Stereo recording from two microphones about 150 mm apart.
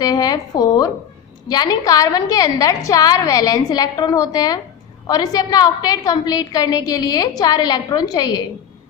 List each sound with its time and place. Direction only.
0.0 s a woman's voice: 25° left (ahead or behind)